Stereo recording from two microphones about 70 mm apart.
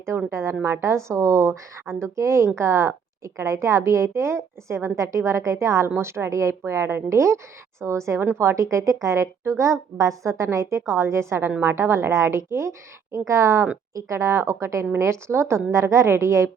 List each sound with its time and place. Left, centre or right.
0.3 s a woman's voice: right